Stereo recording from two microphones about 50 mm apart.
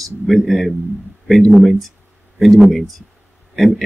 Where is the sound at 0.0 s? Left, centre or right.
Centre.